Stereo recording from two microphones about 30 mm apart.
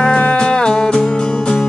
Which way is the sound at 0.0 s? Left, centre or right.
Left.